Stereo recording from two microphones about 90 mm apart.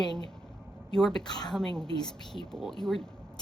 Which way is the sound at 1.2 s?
55° left (ahead or behind).